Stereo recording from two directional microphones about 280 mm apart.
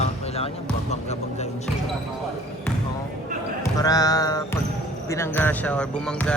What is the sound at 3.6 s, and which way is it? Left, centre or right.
Speech, centre.